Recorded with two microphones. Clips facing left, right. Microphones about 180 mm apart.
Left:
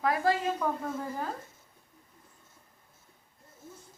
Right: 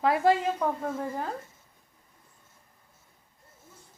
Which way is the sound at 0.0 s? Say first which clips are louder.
Right 4 dB; 25° right (ahead or behind).